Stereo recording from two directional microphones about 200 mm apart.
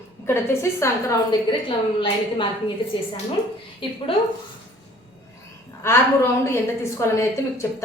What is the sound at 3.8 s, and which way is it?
Speech, 25° left (ahead or behind).